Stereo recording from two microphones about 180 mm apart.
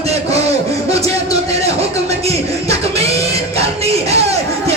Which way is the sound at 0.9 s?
35° right (ahead or behind).